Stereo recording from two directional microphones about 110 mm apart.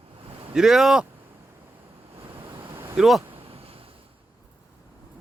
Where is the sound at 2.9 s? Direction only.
5° right (ahead or behind).